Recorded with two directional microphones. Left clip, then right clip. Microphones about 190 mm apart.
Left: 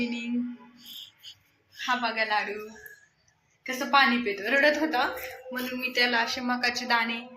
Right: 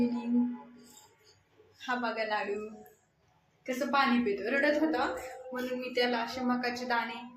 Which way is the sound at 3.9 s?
15° left (ahead or behind).